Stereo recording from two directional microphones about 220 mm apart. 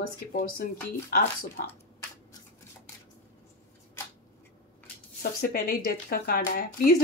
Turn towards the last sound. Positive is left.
turn(degrees=40)  # may be behind; listen again after turning